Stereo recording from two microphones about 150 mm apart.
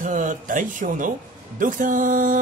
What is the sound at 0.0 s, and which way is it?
Speech, 60° right (ahead or behind).